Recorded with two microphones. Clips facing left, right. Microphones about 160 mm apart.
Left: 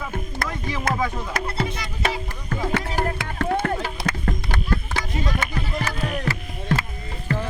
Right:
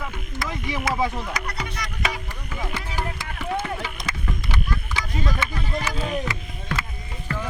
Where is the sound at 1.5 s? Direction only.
25° left (ahead or behind).